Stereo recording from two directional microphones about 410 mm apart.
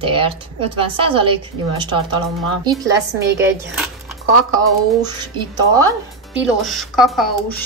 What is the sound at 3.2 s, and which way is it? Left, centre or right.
Speech, centre.